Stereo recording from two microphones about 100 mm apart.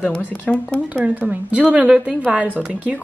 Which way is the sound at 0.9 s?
15° right (ahead or behind).